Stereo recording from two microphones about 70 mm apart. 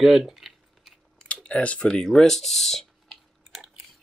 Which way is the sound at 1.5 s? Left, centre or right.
Centre.